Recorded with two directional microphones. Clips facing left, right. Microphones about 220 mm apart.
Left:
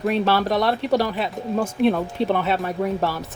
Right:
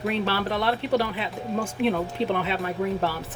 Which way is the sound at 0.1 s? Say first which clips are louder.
Left 7 dB; 45° left (ahead or behind).